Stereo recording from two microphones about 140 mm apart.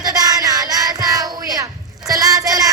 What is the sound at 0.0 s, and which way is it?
Child singing, 25° right (ahead or behind).